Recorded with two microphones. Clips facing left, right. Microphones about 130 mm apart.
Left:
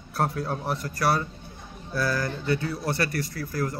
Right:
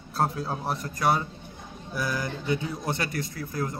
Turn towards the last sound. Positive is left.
turn(degrees=-20)  # may be behind; listen again after turning